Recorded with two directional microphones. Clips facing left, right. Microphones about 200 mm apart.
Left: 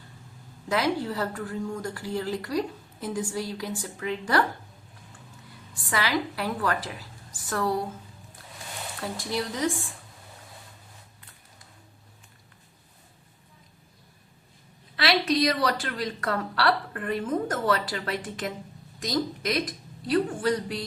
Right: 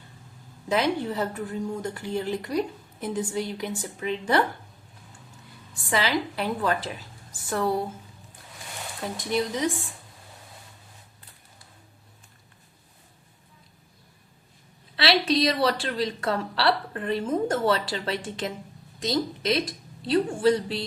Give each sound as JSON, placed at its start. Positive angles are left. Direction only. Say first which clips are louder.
{"t": 0.7, "sound": "a woman's voice", "louder": "right 1 dB", "side_deg": -20}
{"t": 5.9, "sound": "a woman's voice", "louder": "right 2 dB", "side_deg": -25}
{"t": 9.0, "sound": "a woman's voice", "louder": "right 4 dB", "side_deg": -20}
{"t": 14.9, "sound": "a woman's voice", "louder": "right 1 dB", "side_deg": -30}